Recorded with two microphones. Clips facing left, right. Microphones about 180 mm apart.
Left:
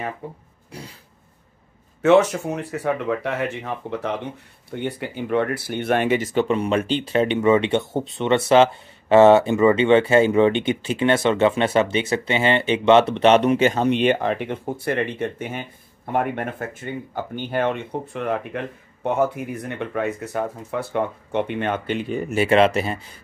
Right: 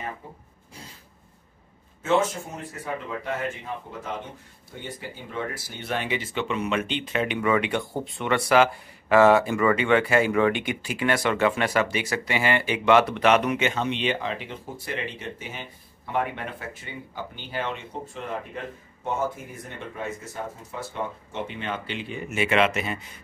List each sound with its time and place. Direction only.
0.2 s speech: 70° left (ahead or behind)
2.0 s speech: 70° left (ahead or behind); by 23.1 s 35° left (ahead or behind)